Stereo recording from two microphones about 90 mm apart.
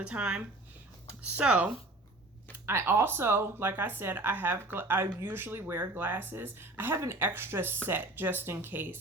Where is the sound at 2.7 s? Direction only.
30° right (ahead or behind).